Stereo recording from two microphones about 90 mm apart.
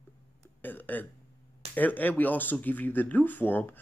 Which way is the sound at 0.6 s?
20° left (ahead or behind).